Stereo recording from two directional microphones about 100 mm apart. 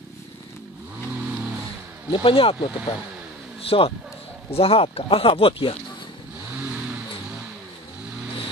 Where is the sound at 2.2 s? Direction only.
65° left (ahead or behind).